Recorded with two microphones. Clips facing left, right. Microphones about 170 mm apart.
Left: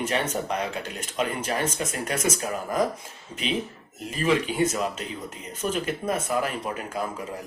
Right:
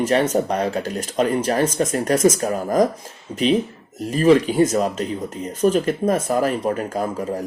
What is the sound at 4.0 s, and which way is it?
Speech, 40° right (ahead or behind).